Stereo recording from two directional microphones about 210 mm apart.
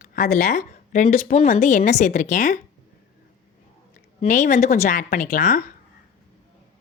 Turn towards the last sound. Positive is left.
turn(degrees=40)  # may be behind; listen again after turning